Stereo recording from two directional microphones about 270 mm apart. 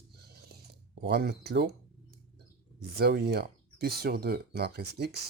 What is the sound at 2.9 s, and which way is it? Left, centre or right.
Speech, right.